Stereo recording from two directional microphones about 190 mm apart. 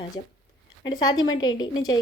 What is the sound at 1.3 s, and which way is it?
Speech, 20° left (ahead or behind).